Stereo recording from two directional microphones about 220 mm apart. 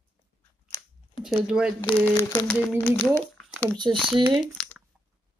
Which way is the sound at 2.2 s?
5° left (ahead or behind).